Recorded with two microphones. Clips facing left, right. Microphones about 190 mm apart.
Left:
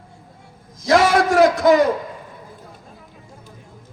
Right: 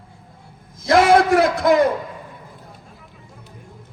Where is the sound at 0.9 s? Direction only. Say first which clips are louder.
Right 2 dB; 60° right (ahead or behind).